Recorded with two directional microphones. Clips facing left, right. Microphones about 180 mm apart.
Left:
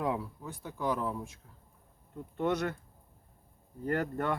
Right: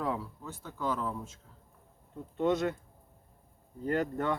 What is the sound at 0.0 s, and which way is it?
Speech, 15° left (ahead or behind).